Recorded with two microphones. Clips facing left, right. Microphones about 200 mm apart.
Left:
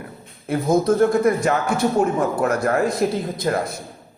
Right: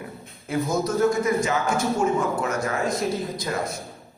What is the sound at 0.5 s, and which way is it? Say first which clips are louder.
A man's voice: left 6 dB; 55° left (ahead or behind).